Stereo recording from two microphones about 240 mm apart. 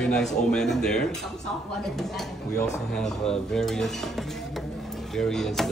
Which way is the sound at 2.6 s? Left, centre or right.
Centre.